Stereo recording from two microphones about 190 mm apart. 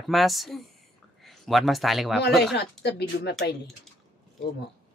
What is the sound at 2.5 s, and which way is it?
Speech, 60° left (ahead or behind).